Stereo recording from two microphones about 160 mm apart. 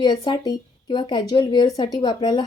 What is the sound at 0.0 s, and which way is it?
Speech, 25° left (ahead or behind).